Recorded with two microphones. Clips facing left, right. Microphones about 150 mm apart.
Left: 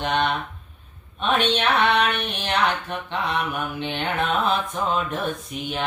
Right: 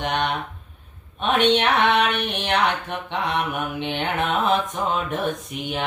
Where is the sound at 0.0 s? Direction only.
15° right (ahead or behind).